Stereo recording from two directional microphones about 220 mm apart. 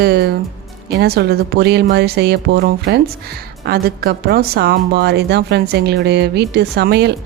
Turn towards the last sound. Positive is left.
turn(degrees=-50)  # may be behind; listen again after turning